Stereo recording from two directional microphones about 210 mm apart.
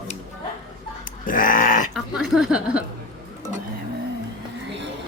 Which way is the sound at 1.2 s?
40° left (ahead or behind).